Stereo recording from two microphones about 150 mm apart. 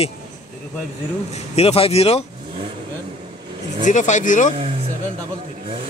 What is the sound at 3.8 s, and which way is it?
Speech, 55° left (ahead or behind).